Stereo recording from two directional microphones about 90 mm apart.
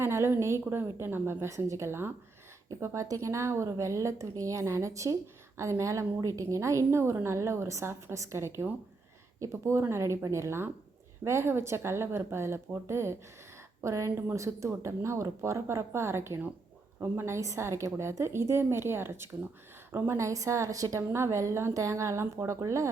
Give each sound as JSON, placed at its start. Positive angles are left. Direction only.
{"t": 0.0, "sound": "a woman's voice", "side_deg": -30}